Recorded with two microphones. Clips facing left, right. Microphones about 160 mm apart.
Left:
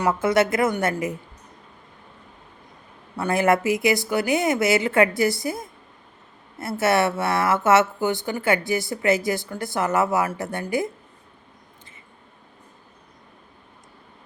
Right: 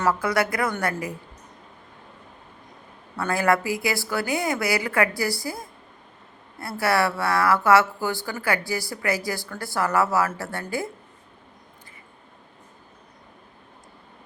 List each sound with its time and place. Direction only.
0.0 s speech: 20° left (ahead or behind)
3.2 s speech: 20° left (ahead or behind)